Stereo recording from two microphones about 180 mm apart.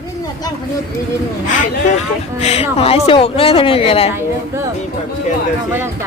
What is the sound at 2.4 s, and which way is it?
A woman's voice, 35° left (ahead or behind).